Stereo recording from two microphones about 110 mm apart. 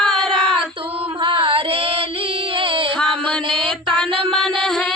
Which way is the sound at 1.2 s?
55° right (ahead or behind).